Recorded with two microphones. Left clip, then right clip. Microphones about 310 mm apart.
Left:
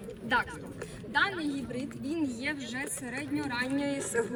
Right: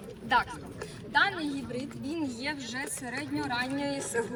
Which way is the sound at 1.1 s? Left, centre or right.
Centre.